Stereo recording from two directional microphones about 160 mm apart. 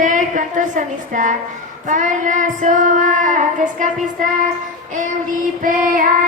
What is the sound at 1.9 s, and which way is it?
Child singing, 50° right (ahead or behind).